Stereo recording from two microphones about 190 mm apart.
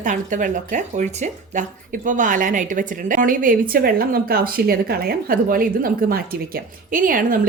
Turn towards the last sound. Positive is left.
turn(degrees=-45)  # may be behind; listen again after turning